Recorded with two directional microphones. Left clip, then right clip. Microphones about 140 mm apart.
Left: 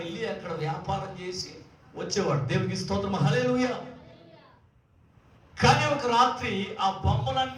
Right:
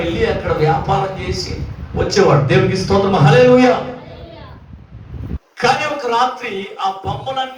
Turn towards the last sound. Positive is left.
turn(degrees=45)  # may be behind; listen again after turning